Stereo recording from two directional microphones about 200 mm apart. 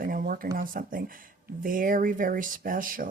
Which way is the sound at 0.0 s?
45° right (ahead or behind).